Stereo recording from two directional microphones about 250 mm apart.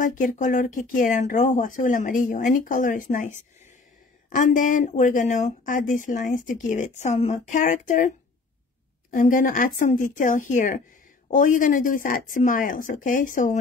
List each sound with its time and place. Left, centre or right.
0.0 s speech: left
9.1 s speech: left